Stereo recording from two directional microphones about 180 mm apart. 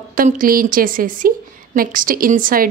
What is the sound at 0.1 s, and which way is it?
A woman's voice, 50° right (ahead or behind).